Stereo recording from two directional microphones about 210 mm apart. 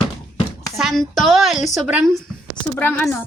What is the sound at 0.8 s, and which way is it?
Speech, centre (ahead or behind).